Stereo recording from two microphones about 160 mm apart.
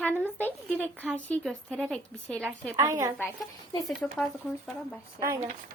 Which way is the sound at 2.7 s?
20° right (ahead or behind).